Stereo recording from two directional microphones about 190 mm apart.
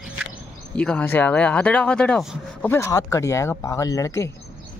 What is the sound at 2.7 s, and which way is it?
Speech, 15° left (ahead or behind).